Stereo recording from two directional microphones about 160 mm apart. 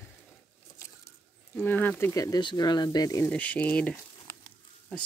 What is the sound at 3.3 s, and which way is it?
Speech, 10° left (ahead or behind).